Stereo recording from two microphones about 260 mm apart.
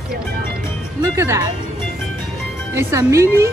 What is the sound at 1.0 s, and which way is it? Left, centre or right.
Speech, centre.